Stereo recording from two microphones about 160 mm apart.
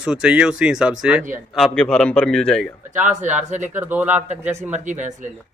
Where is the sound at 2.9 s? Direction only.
50° right (ahead or behind).